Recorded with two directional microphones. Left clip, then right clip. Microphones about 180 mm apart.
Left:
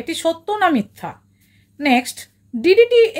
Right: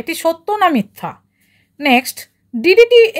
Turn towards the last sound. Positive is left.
turn(degrees=-45)  # may be behind; listen again after turning